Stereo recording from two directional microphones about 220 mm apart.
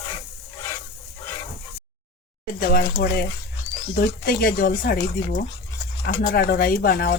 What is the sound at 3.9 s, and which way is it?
Speech, 45° left (ahead or behind).